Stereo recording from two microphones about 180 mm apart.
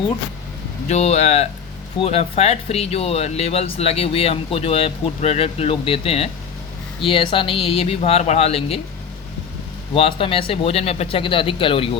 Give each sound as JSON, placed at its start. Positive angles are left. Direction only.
{"t": 0.9, "sound": "speech", "side_deg": 35}
{"t": 9.9, "sound": "speech", "side_deg": 30}